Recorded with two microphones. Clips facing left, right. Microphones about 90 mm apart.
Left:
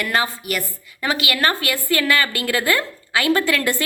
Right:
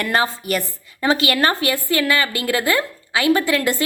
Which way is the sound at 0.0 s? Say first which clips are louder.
Right 2 dB; 35° right (ahead or behind).